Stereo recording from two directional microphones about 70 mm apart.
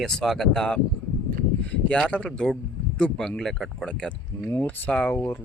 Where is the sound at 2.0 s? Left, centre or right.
Centre.